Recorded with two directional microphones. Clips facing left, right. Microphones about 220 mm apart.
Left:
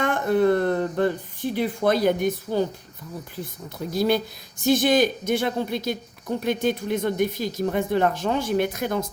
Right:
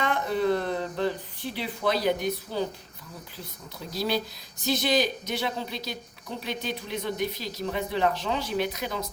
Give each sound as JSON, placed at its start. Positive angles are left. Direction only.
{"t": 0.0, "sound": "speech", "side_deg": 50}